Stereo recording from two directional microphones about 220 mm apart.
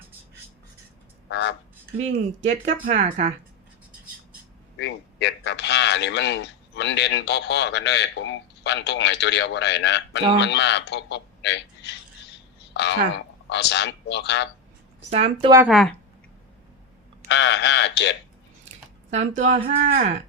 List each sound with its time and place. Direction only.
1.3 s speech: 55° left (ahead or behind)
2.8 s speech: 35° right (ahead or behind)
4.8 s a man's voice: 50° left (ahead or behind)
15.1 s speech: 25° right (ahead or behind)
15.7 s speech: centre (ahead or behind)
17.2 s a man's voice: 55° left (ahead or behind)
19.1 s speech: 35° right (ahead or behind)